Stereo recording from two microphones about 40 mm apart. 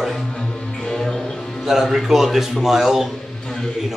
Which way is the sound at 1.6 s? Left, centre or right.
Centre.